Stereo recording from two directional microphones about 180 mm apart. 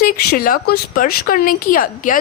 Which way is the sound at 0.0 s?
55° left (ahead or behind).